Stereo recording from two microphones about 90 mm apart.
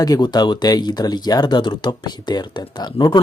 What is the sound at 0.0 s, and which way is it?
Speech, 45° left (ahead or behind).